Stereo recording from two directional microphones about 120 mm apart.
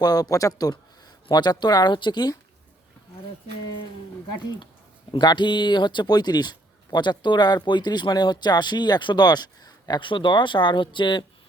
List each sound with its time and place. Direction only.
0.0 s speech: 30° left (ahead or behind)
5.1 s speech: 40° left (ahead or behind)